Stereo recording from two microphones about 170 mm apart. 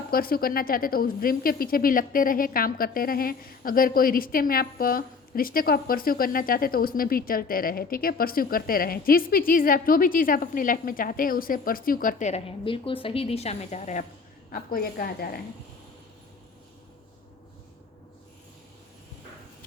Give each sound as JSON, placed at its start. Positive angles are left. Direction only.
{"t": 0.1, "sound": "a woman's voice", "side_deg": 60}
{"t": 14.5, "sound": "a woman's voice", "side_deg": 60}